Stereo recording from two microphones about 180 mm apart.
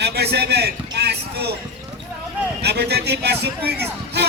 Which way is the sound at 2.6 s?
65° right (ahead or behind).